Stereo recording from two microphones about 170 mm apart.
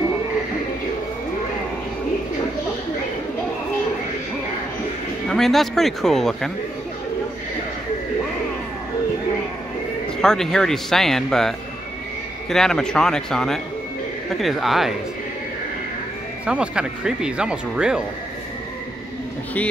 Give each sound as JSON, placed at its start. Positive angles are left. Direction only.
{"t": 5.3, "sound": "speech", "side_deg": 0}
{"t": 10.2, "sound": "speech", "side_deg": 5}
{"t": 16.4, "sound": "speech", "side_deg": -5}